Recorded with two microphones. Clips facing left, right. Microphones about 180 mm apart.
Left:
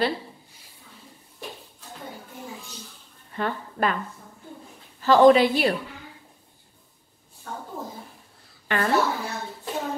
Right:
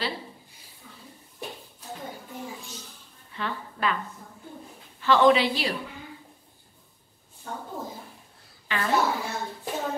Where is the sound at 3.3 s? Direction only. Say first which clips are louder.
Left 5 dB; 45° left (ahead or behind).